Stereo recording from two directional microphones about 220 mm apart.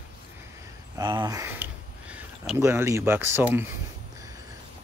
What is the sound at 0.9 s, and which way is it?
Speech, 20° right (ahead or behind).